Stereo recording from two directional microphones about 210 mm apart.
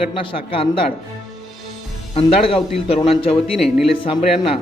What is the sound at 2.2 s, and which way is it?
Speech, 25° left (ahead or behind).